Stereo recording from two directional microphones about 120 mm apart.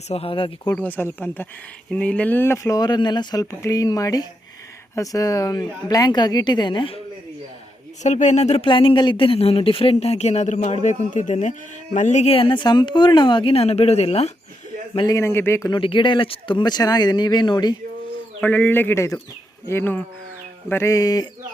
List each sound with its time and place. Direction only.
0.1 s speech: 50° left (ahead or behind)
0.8 s speech: 15° left (ahead or behind)
2.7 s speech: 35° left (ahead or behind)
8.0 s speech: 80° left
8.6 s speech: 45° left (ahead or behind); by 12.3 s 80° left
12.3 s speech: 45° left (ahead or behind); by 14.3 s 60° left (ahead or behind)
15.0 s speech: 25° left (ahead or behind)
15.7 s speech: 45° left (ahead or behind)
18.3 s speech: 15° left (ahead or behind); by 21.2 s 30° left (ahead or behind)